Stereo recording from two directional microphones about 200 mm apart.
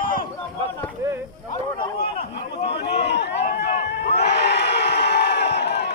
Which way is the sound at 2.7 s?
55° left (ahead or behind).